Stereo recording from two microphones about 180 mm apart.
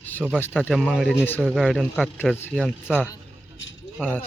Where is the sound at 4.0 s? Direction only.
10° left (ahead or behind).